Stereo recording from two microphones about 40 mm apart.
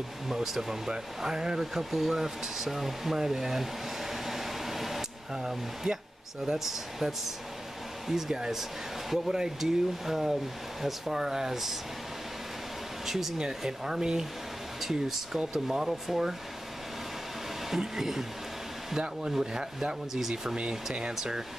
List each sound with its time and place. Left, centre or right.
0.3 s speech: centre
13.0 s speech: centre
14.8 s speech: centre
17.6 s speech: centre
20.5 s speech: right